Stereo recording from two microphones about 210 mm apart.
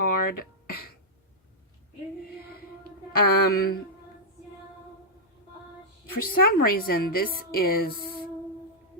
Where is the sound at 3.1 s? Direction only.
45° left (ahead or behind).